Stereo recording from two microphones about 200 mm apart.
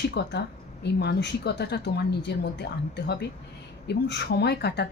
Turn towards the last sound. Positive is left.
turn(degrees=55)  # may be behind; listen again after turning